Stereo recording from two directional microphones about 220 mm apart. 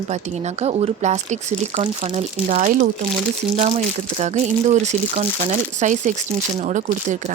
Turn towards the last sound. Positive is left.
turn(degrees=-35)  # may be behind; listen again after turning